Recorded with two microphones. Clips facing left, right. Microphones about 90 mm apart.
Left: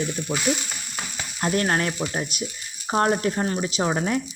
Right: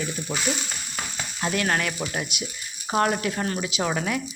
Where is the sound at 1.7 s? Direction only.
30° left (ahead or behind).